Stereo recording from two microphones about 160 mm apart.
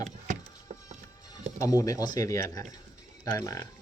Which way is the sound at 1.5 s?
20° left (ahead or behind).